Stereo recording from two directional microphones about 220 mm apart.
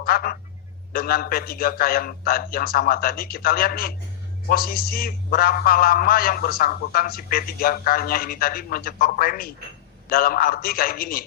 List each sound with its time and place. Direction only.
0.0 s a man's voice: 40° left (ahead or behind)